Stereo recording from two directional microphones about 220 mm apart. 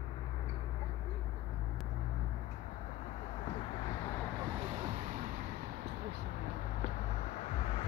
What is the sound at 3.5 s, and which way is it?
Vehicle, 25° left (ahead or behind).